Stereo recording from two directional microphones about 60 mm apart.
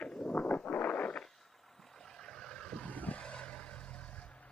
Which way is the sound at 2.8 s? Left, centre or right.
Left.